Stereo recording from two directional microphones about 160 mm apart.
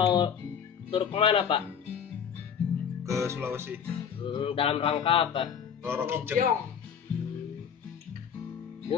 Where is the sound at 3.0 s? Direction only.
20° right (ahead or behind).